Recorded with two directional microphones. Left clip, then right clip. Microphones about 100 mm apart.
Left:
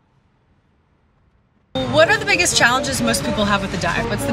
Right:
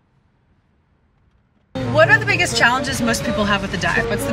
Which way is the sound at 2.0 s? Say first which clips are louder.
Right 1 dB; 20° left (ahead or behind).